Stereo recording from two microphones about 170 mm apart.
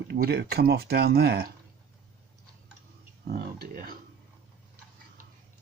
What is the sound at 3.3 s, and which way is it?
Speech, 65° right (ahead or behind).